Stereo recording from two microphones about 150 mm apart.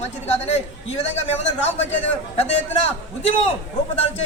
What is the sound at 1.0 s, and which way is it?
Speech, 45° left (ahead or behind).